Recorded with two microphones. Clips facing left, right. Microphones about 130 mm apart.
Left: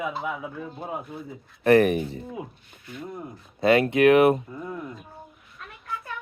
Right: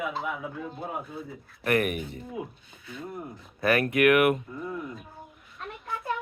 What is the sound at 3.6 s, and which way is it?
Speech, 25° left (ahead or behind).